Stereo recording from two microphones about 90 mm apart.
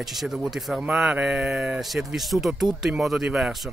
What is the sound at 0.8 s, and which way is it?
Speech, 10° right (ahead or behind).